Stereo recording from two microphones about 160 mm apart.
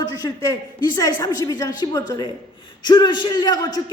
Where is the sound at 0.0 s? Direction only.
25° left (ahead or behind).